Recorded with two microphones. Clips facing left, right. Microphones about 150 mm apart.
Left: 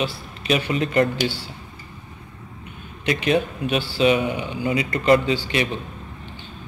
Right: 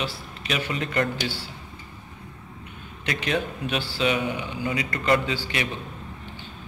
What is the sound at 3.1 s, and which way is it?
A man's voice, 15° left (ahead or behind).